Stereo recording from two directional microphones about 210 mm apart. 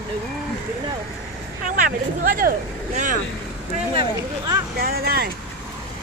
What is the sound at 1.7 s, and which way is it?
Speech, 40° right (ahead or behind).